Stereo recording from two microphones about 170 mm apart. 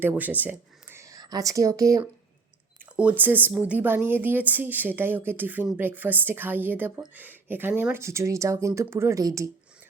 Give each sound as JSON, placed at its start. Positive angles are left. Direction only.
{"t": 0.0, "sound": "speech", "side_deg": -10}
{"t": 2.9, "sound": "speech", "side_deg": -5}